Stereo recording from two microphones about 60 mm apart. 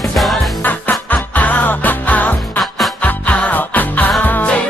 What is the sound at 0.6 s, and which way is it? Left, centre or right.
Music, left.